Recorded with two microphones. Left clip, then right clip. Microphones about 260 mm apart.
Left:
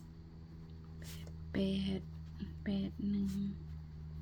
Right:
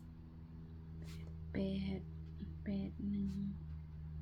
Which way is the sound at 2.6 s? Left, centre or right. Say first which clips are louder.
Left 4 dB; left.